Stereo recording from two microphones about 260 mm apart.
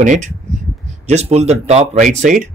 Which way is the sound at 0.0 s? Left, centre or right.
Right.